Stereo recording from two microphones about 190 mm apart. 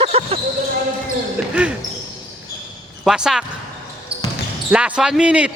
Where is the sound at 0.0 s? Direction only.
30° right (ahead or behind).